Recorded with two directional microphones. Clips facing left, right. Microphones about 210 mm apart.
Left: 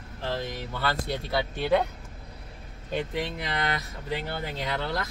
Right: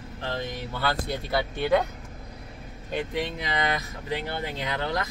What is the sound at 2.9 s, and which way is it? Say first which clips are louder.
Speech: right 1 dB; centre (ahead or behind).